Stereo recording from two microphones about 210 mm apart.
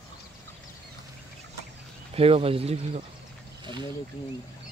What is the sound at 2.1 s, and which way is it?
Speech, 30° right (ahead or behind).